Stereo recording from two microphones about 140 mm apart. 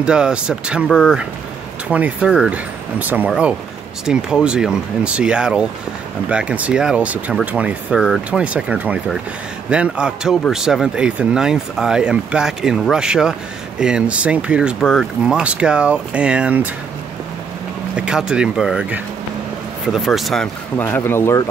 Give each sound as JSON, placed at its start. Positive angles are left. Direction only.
{"t": 0.0, "sound": "speech", "side_deg": -5}
{"t": 17.9, "sound": "speech", "side_deg": -5}
{"t": 20.7, "sound": "speech", "side_deg": 15}